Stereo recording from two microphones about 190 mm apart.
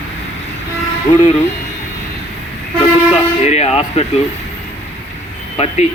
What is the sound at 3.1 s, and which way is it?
Speech, 35° left (ahead or behind).